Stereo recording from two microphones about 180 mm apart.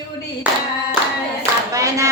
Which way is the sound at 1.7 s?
15° right (ahead or behind).